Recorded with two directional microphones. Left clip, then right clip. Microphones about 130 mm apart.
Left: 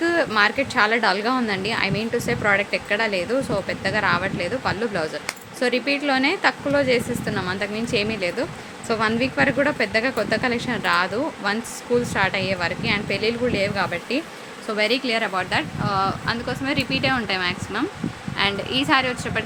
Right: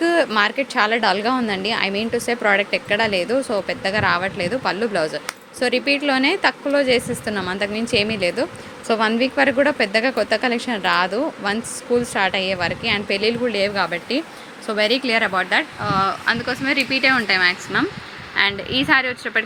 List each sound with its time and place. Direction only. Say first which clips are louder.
0.0 s a woman's voice: right 2 dB; 25° right (ahead or behind)